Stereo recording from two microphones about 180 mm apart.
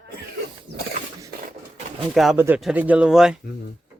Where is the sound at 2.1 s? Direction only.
Centre (ahead or behind).